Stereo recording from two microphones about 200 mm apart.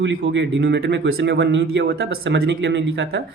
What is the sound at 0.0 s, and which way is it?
Speech, 65° right (ahead or behind).